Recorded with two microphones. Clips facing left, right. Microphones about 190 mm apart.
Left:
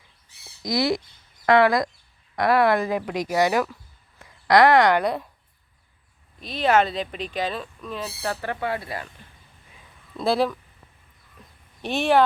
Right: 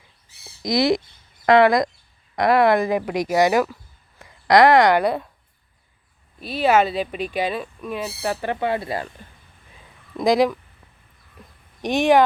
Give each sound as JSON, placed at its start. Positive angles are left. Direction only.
{"t": 0.6, "sound": "speech", "side_deg": -20}
{"t": 6.4, "sound": "speech", "side_deg": -10}
{"t": 10.2, "sound": "speech", "side_deg": -15}
{"t": 11.8, "sound": "speech", "side_deg": -15}